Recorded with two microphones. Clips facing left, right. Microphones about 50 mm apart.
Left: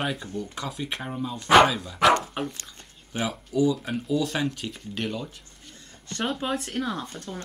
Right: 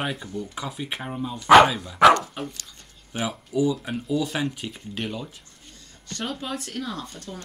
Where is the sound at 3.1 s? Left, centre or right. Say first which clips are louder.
Even; centre.